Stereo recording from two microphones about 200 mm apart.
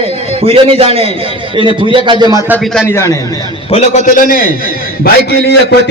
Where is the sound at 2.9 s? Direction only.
15° left (ahead or behind).